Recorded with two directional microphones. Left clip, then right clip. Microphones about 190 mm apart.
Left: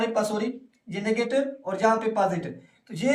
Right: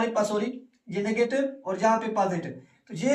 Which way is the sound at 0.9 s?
25° left (ahead or behind).